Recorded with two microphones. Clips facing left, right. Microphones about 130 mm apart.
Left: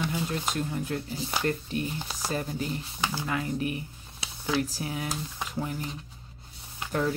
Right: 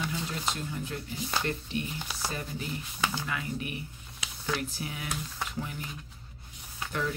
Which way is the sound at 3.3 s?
35° left (ahead or behind).